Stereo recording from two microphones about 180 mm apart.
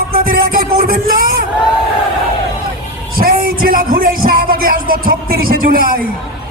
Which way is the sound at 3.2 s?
55° right (ahead or behind).